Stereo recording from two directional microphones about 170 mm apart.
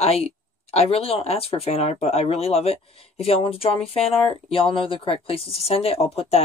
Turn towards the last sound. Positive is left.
turn(degrees=35)  # may be behind; listen again after turning